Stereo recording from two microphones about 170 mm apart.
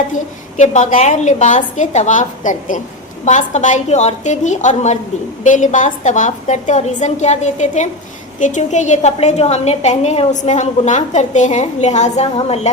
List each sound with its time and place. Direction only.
0.1 s a woman's voice: 45° left (ahead or behind)